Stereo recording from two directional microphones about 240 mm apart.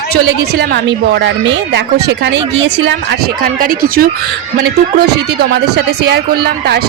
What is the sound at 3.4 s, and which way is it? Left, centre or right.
Speech, right.